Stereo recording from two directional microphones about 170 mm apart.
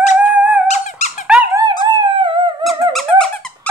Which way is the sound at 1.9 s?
30° right (ahead or behind).